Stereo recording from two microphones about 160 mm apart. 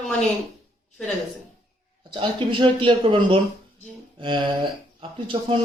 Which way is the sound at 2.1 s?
30° right (ahead or behind).